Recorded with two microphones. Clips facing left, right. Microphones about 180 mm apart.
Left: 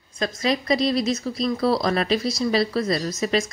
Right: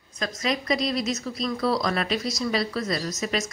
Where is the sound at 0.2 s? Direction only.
30° left (ahead or behind).